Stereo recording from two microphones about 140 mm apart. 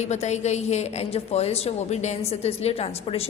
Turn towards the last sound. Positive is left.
turn(degrees=45)  # may be behind; listen again after turning